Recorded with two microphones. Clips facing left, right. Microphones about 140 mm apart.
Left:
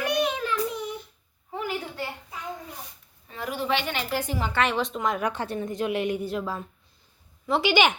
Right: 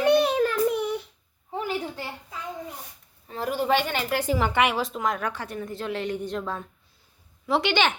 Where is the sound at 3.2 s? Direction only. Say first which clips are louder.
Right 4 dB; 40° right (ahead or behind).